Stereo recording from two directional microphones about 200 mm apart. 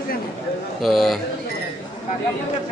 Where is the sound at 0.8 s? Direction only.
Centre (ahead or behind).